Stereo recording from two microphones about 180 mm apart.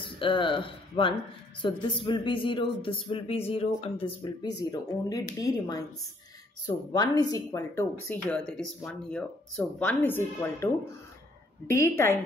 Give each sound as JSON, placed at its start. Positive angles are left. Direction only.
{"t": 0.0, "sound": "speech", "side_deg": 30}
{"t": 6.9, "sound": "speech", "side_deg": 20}